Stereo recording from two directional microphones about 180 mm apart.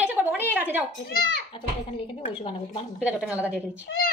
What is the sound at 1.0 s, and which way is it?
Speech, 60° left (ahead or behind).